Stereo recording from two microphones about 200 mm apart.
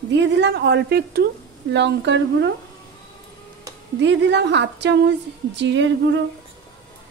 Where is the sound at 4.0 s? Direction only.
65° right (ahead or behind).